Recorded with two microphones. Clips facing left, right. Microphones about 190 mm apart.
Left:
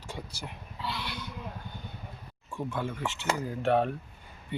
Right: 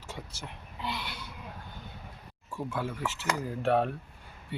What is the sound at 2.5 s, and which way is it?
Speech, 5° right (ahead or behind).